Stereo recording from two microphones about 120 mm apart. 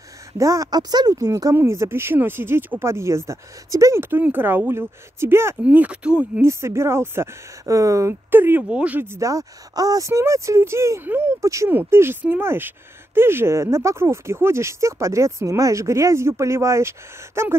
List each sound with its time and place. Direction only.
0.4 s speech: 30° right (ahead or behind); by 6.4 s 10° right (ahead or behind)
6.4 s speech: 20° right (ahead or behind)